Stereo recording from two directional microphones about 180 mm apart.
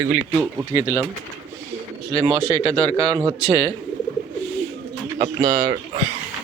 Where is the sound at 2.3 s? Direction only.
30° left (ahead or behind).